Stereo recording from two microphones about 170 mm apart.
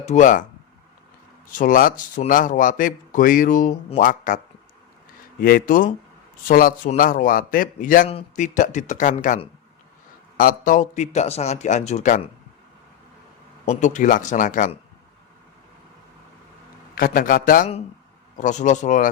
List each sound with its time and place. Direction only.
0.0 s speech: 45° left (ahead or behind)
1.5 s speech: 50° left (ahead or behind)
5.4 s a man's voice: 60° left (ahead or behind)
8.0 s speech: 35° left (ahead or behind)
8.4 s speech: 50° left (ahead or behind)
13.7 s speech: 45° left (ahead or behind)
16.9 s a man's voice: 55° left (ahead or behind)